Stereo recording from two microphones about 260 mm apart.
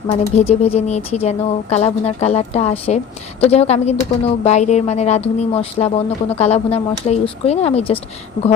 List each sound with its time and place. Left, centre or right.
0.1 s a woman's voice: left